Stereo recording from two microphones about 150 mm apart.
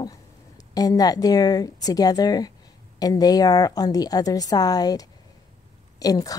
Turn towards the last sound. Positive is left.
turn(degrees=25)  # may be behind; listen again after turning